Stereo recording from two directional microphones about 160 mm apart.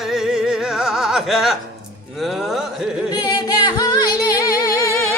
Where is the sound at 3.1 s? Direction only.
25° left (ahead or behind).